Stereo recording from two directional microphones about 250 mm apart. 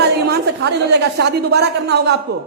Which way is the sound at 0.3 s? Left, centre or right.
Right.